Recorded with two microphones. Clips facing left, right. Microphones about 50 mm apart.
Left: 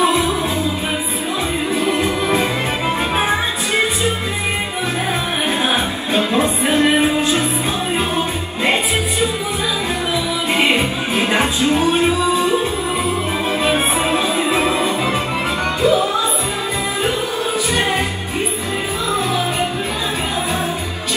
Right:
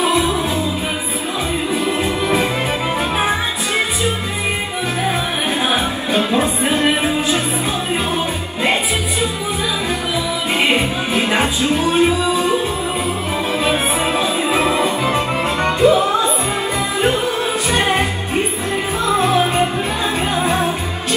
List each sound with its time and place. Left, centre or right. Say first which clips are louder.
5.7 s music: right 1 dB; left
10.5 s music: even; left
14.5 s music: right 1 dB; right
19.0 s music: right 5 dB; right